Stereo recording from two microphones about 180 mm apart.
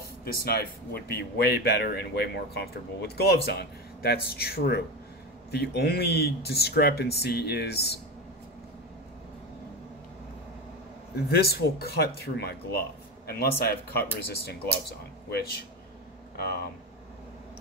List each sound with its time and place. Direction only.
0.2 s speech: 60° left (ahead or behind)
11.1 s speech: 60° left (ahead or behind)